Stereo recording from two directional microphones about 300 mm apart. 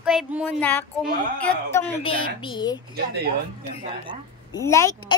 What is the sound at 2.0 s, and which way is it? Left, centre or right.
Speech, centre.